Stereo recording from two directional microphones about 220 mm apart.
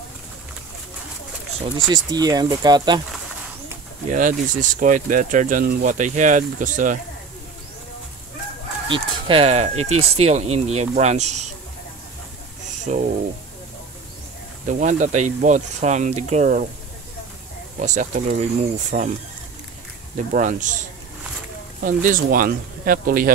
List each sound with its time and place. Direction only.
1.9 s speech: 15° right (ahead or behind)
4.1 s speech: 35° right (ahead or behind)
8.8 s speech: 25° right (ahead or behind)
12.6 s a sound: 35° right (ahead or behind)
14.7 s speech: 35° right (ahead or behind)
17.7 s speech: 35° right (ahead or behind)
20.2 s speech: 35° right (ahead or behind)
21.8 s speech: 35° right (ahead or behind)